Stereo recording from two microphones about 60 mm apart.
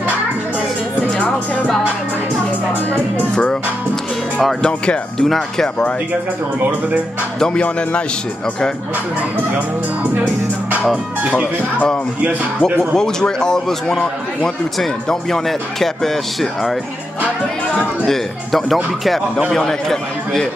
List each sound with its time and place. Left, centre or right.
4.6 s a man's voice: centre
7.3 s a man's voice: centre
10.8 s speech: centre
12.9 s a man's voice: centre
18.0 s a man's voice: centre